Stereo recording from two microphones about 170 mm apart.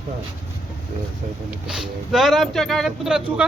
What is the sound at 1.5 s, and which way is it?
A man's voice, 5° right (ahead or behind).